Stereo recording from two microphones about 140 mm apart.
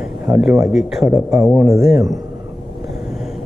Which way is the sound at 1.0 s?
20° right (ahead or behind).